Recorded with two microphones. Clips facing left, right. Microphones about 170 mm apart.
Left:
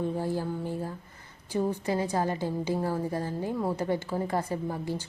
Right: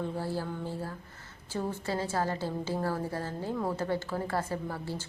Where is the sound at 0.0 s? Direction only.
15° left (ahead or behind).